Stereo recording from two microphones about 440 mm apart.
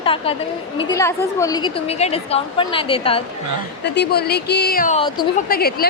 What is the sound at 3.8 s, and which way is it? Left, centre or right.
A woman's voice, left.